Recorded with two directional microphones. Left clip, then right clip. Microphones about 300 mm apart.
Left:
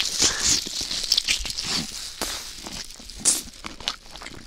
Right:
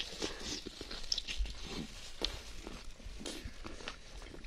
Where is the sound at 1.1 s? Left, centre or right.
Left.